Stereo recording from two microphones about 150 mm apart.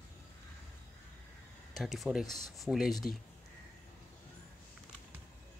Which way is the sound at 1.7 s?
Centre (ahead or behind).